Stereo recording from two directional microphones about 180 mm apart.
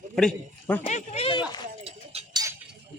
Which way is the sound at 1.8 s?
35° right (ahead or behind).